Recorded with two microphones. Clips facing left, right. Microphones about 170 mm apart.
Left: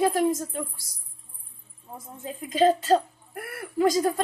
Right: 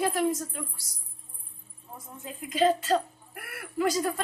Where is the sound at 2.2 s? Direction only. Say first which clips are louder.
Left 3 dB; 35° left (ahead or behind).